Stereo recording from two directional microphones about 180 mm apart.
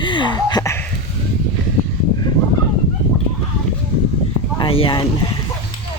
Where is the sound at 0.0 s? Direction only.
25° left (ahead or behind).